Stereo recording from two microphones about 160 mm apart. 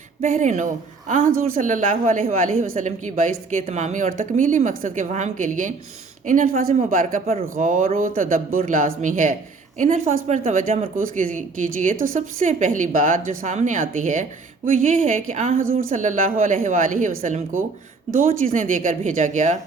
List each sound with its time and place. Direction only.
0.3 s a woman's voice: 50° right (ahead or behind)